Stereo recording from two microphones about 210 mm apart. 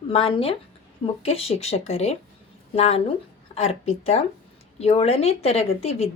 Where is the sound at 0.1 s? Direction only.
25° left (ahead or behind).